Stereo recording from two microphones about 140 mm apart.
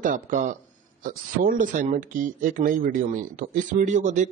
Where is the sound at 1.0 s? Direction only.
75° right (ahead or behind).